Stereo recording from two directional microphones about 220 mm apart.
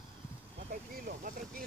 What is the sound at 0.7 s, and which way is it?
Vehicle, 40° right (ahead or behind).